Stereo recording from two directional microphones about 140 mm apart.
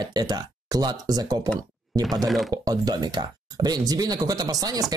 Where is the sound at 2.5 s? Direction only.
25° right (ahead or behind).